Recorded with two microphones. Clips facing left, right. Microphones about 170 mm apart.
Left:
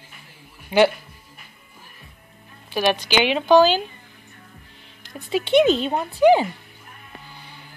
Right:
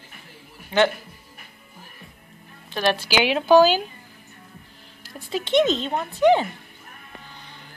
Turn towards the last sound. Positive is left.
turn(degrees=10)  # may be behind; listen again after turning